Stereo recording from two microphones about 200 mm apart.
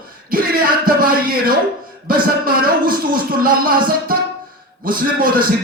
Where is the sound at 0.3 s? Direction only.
45° right (ahead or behind).